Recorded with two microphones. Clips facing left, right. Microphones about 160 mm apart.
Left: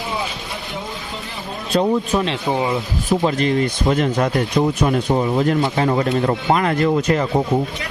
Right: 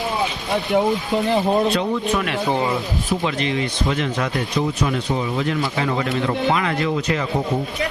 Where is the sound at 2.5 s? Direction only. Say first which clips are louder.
Left 1 dB; 15° left (ahead or behind).